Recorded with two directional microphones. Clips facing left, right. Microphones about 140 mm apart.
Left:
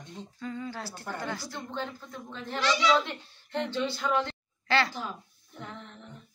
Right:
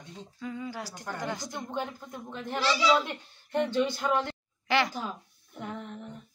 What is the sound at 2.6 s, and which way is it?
Speech, 5° right (ahead or behind).